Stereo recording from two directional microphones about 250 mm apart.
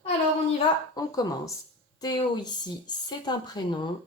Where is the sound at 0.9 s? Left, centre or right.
Centre.